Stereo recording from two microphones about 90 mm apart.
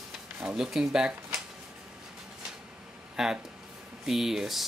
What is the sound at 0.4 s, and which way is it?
Speech, 5° right (ahead or behind).